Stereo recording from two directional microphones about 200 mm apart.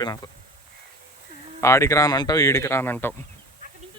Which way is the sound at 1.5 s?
15° left (ahead or behind).